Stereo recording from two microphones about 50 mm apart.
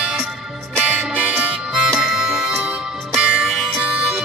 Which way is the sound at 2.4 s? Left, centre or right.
Centre.